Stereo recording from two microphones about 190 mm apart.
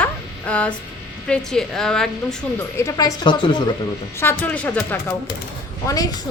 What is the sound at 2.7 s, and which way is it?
Speech, 15° left (ahead or behind).